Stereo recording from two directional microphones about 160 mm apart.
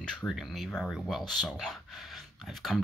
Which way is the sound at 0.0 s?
Centre (ahead or behind).